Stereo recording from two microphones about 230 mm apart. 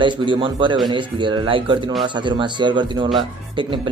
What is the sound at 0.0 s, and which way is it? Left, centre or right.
A man's voice, right.